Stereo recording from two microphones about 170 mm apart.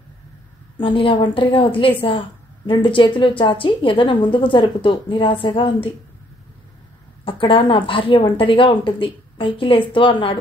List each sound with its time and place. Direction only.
0.7 s a woman's voice: 30° left (ahead or behind)
7.2 s a woman's voice: 30° left (ahead or behind)